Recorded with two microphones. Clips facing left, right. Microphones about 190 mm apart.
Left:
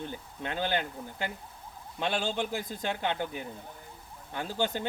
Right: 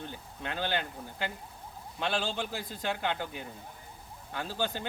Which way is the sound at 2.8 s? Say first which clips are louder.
Even; 20° left (ahead or behind).